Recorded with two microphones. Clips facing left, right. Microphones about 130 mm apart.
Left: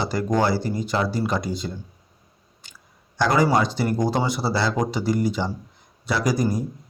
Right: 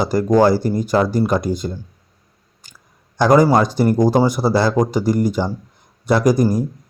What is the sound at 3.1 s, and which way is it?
Speech, 45° right (ahead or behind).